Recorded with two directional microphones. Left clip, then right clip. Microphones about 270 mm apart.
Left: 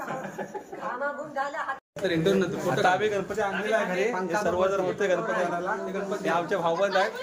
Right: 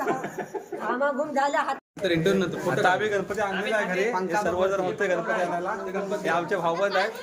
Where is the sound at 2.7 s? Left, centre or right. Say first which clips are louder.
Right 1 dB; centre.